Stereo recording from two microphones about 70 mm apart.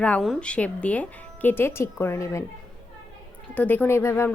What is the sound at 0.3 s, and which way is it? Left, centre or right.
Speech, centre.